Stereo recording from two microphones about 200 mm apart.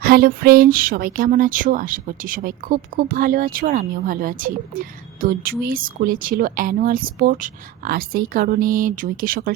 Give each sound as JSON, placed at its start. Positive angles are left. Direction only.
{"t": 0.0, "sound": "speech", "side_deg": -50}